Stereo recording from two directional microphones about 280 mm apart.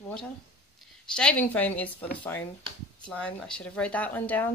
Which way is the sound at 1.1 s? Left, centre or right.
Centre.